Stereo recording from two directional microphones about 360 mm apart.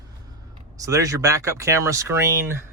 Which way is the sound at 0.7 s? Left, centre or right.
Centre.